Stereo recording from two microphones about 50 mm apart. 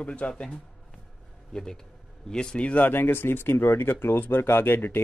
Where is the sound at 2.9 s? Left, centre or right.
Left.